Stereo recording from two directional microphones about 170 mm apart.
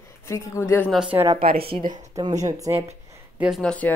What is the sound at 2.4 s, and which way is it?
Speech, 20° right (ahead or behind).